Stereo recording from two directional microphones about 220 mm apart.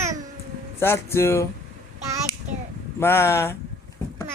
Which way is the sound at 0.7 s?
10° left (ahead or behind).